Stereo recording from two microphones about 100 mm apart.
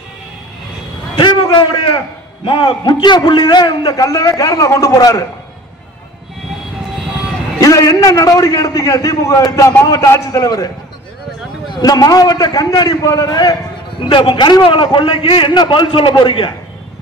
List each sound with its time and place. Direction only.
1.1 s a man's voice: 50° left (ahead or behind)
3.9 s a man's voice: 30° left (ahead or behind)
7.6 s a man's voice: 35° left (ahead or behind)
11.7 s a man's voice: 40° left (ahead or behind)
13.9 s a man's voice: 55° left (ahead or behind)